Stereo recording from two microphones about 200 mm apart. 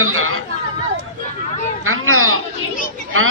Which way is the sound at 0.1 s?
90° right.